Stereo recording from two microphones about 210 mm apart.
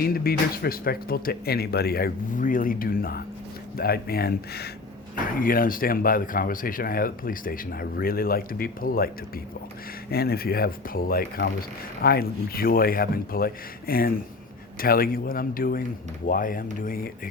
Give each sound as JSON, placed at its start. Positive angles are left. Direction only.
{"t": 0.0, "sound": "speech", "side_deg": 45}